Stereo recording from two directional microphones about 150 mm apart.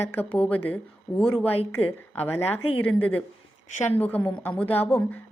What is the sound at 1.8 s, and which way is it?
Speech, 40° left (ahead or behind).